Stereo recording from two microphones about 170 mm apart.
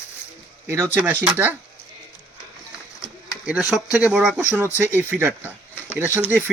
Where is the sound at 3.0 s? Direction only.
5° right (ahead or behind).